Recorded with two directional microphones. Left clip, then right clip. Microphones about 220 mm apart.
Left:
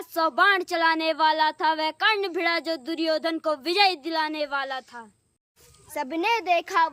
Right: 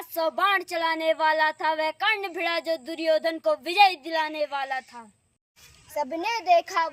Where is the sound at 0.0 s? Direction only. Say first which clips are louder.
Left 4 dB; 25° left (ahead or behind).